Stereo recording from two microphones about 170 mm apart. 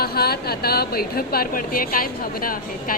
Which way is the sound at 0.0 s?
65° left (ahead or behind).